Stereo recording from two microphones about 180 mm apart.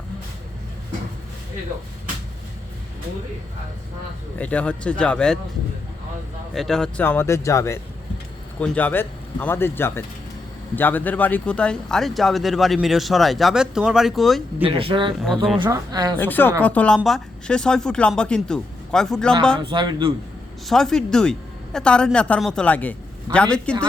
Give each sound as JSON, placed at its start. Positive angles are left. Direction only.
{"t": 4.4, "sound": "speech", "side_deg": 5}
{"t": 6.5, "sound": "speech", "side_deg": 0}
{"t": 14.6, "sound": "speech", "side_deg": -30}
{"t": 16.1, "sound": "speech", "side_deg": 10}
{"t": 19.5, "sound": "speech", "side_deg": -25}
{"t": 20.7, "sound": "speech", "side_deg": 0}